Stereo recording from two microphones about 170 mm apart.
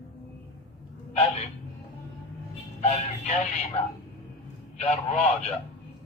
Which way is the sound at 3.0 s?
45° left (ahead or behind).